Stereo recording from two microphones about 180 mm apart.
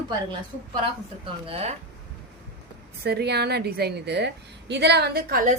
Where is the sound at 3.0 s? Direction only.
65° right (ahead or behind).